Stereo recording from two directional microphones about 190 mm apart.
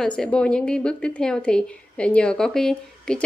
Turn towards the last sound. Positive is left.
turn(degrees=5)  # may be behind; listen again after turning